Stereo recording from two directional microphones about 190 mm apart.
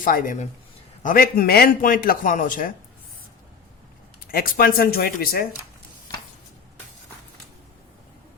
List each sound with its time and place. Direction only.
0.0 s a man's voice: 45° left (ahead or behind)
4.3 s a man's voice: 50° left (ahead or behind)